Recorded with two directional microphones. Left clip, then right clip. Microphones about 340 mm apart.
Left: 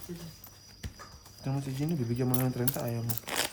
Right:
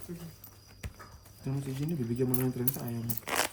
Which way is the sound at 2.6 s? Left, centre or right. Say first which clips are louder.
Left 2 dB; centre.